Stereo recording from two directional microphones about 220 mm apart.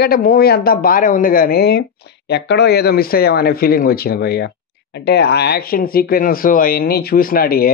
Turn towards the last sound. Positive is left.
turn(degrees=40)  # may be behind; listen again after turning